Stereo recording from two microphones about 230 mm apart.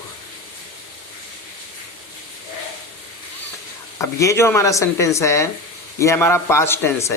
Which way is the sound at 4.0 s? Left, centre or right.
Centre.